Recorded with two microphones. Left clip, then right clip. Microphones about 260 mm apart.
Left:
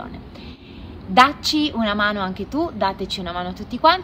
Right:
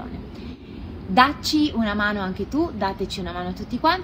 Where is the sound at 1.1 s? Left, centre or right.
Left.